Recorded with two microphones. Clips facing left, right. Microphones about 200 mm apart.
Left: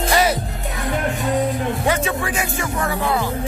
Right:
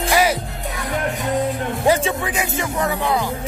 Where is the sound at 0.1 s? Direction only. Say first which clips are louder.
Right 1 dB; 10° right (ahead or behind).